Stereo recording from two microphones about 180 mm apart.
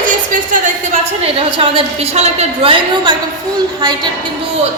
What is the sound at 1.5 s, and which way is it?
A woman's voice, 35° right (ahead or behind).